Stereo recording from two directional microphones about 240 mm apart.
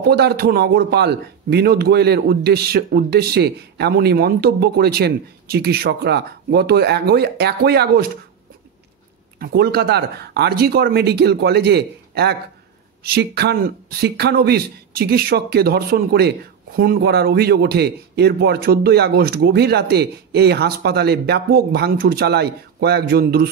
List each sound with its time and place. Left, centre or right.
0.0 s speech: right
9.4 s a man's voice: right